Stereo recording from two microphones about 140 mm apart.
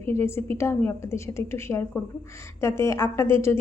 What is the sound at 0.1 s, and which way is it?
A woman's voice, 20° left (ahead or behind).